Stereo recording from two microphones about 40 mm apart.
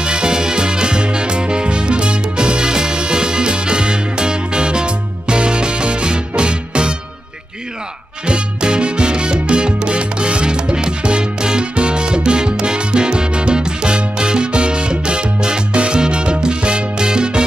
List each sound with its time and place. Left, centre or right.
0.0 s swing music: right
8.3 s music: right